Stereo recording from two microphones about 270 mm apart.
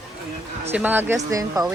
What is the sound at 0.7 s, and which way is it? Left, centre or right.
Music, centre.